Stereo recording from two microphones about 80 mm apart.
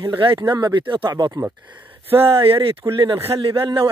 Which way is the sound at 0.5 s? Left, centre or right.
Right.